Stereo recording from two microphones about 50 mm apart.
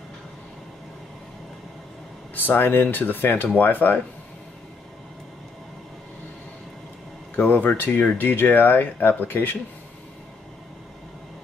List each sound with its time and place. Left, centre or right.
2.3 s speech: left
7.3 s speech: left